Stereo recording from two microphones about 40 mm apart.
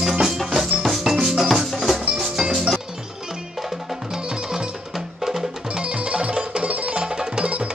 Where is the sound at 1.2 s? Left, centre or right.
Centre.